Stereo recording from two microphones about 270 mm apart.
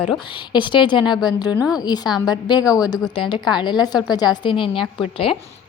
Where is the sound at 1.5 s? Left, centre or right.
Centre.